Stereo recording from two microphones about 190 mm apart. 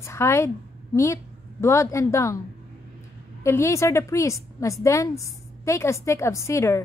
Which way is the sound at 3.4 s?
15° left (ahead or behind).